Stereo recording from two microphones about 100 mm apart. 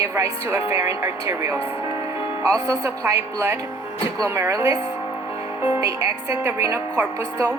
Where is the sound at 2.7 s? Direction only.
30° right (ahead or behind).